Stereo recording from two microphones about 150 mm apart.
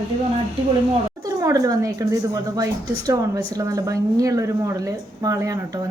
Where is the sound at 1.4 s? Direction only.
25° right (ahead or behind).